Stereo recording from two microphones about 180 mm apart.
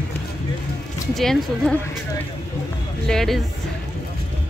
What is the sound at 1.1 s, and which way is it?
Speech, centre (ahead or behind).